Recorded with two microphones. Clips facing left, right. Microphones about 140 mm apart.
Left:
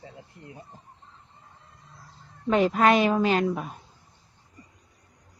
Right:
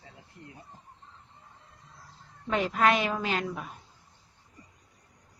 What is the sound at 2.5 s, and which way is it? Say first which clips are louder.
A woman's voice: left 5 dB; 35° left (ahead or behind).